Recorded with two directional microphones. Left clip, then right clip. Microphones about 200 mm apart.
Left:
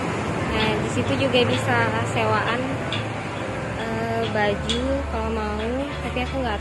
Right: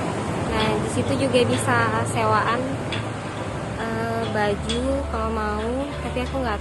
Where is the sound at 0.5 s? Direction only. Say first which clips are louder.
Right 1 dB; 55° right (ahead or behind).